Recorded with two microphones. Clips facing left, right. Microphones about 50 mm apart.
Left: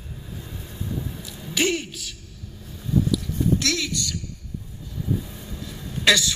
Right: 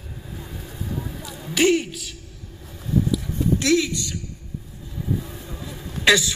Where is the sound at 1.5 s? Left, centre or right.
Centre.